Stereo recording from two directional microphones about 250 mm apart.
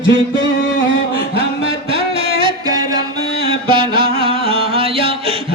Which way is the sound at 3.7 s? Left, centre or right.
Right.